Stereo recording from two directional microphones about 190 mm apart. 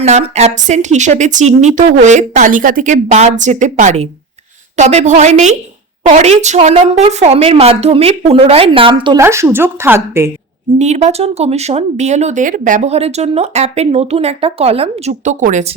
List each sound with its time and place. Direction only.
0.0 s speech: 35° right (ahead or behind)
9.1 s speech: 15° right (ahead or behind)
10.8 s speech: 35° right (ahead or behind)